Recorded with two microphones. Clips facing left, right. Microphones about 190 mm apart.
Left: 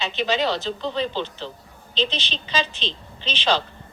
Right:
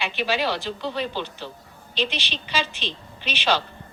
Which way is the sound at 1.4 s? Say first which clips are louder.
Left 2 dB; 10° right (ahead or behind).